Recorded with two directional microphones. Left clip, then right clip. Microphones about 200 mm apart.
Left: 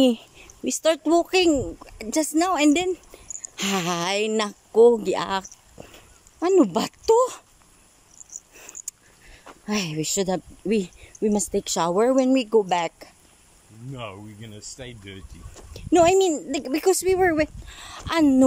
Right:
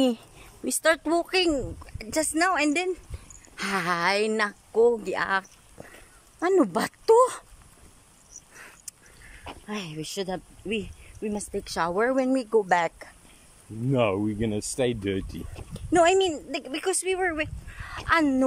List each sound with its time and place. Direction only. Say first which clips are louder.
0.7 s speech: left 2 dB; 10° left (ahead or behind)
8.5 s a sound: left 4 dB; 15° left (ahead or behind)
9.7 s speech: left 9 dB; 15° left (ahead or behind)
13.9 s speech: right 13 dB; 60° right (ahead or behind)
15.7 s speech: left 3 dB; 10° left (ahead or behind)